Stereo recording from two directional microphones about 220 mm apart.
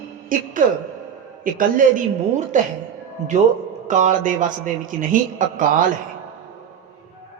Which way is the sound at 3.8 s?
35° right (ahead or behind).